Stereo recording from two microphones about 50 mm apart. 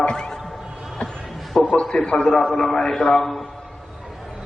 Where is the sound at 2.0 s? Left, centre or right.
Left.